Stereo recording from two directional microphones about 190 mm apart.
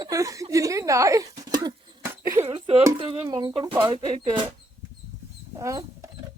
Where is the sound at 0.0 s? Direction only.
15° right (ahead or behind).